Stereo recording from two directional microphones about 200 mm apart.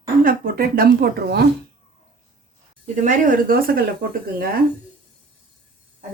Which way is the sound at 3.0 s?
40° right (ahead or behind).